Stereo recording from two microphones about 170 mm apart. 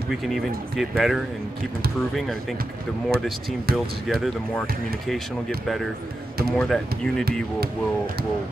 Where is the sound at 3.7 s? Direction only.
65° right (ahead or behind).